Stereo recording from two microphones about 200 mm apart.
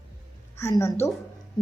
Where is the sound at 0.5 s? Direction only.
15° left (ahead or behind).